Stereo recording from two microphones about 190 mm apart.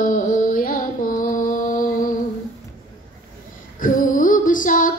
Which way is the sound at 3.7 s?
45° left (ahead or behind).